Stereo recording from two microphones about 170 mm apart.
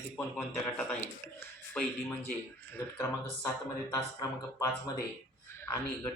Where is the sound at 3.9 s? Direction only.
20° left (ahead or behind).